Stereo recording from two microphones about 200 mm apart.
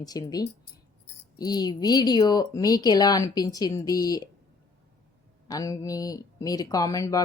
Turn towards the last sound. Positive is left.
turn(degrees=15)  # may be behind; listen again after turning